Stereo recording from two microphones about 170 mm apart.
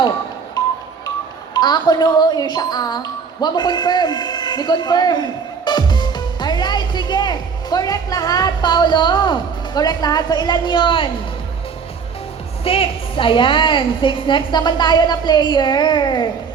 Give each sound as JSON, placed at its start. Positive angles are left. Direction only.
{"t": 1.5, "sound": "speech", "side_deg": 25}
{"t": 12.6, "sound": "a woman's voice", "side_deg": 35}